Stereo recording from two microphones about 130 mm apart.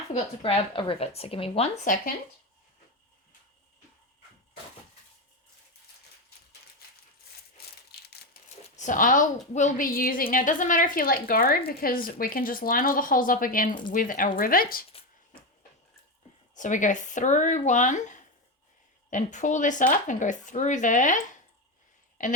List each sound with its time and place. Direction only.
0.4 s a woman's voice: 45° left (ahead or behind)
8.7 s speech: 80° left
9.6 s a woman's voice: 80° left
16.6 s speech: 75° left (ahead or behind)
22.2 s a woman's voice: 80° left